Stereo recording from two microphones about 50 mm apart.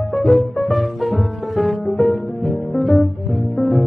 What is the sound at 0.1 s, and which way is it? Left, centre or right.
Music, centre.